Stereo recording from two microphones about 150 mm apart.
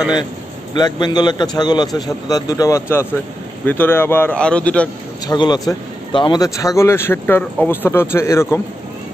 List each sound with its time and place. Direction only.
0.7 s a man's voice: 30° left (ahead or behind); by 4.8 s 10° left (ahead or behind)
5.2 s a man's voice: 25° left (ahead or behind)